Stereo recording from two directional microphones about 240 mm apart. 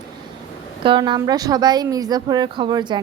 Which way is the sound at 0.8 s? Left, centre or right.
Centre.